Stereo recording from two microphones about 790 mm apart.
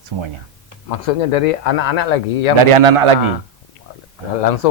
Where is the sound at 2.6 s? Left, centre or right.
Right.